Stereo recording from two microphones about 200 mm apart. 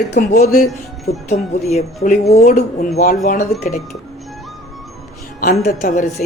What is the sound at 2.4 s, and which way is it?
Speech, 50° left (ahead or behind).